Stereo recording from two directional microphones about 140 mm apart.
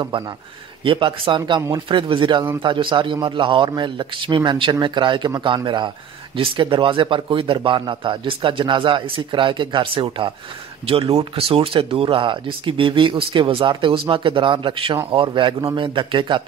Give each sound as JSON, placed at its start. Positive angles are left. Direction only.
{"t": 0.8, "sound": "speech", "side_deg": -35}